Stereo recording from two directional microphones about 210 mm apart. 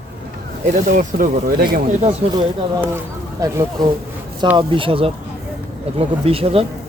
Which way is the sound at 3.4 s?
15° right (ahead or behind).